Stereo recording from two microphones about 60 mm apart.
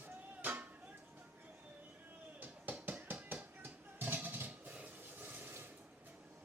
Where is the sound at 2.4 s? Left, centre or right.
Right.